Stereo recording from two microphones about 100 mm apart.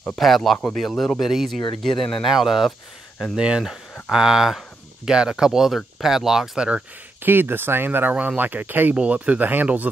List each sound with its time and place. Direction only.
0.0 s speech: centre (ahead or behind)
7.2 s speech: 20° right (ahead or behind)